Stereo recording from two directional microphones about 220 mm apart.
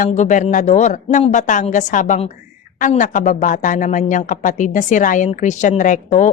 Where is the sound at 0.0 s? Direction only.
35° left (ahead or behind).